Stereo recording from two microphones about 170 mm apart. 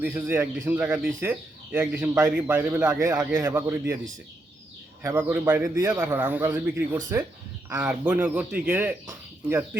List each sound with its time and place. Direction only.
0.0 s a man's voice: 15° right (ahead or behind)
5.0 s a man's voice: 10° right (ahead or behind)